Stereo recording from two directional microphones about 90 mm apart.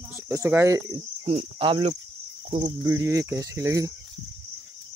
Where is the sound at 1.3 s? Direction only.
90° right.